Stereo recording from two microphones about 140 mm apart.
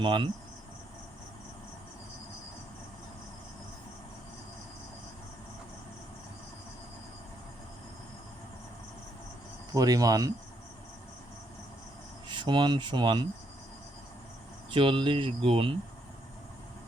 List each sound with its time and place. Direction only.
0.0 s speech: 35° right (ahead or behind)
9.7 s speech: 25° right (ahead or behind)
12.3 s speech: 35° right (ahead or behind)
14.7 s speech: 40° right (ahead or behind)